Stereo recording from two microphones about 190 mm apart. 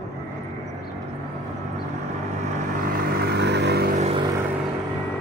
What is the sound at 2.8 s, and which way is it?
Vehicle, 50° right (ahead or behind).